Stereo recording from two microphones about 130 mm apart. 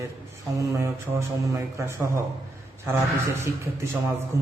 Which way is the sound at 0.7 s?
25° right (ahead or behind).